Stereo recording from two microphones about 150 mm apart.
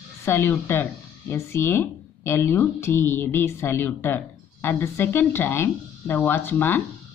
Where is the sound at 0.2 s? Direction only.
15° left (ahead or behind).